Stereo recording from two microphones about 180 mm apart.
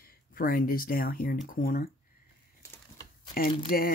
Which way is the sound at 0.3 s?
50° left (ahead or behind).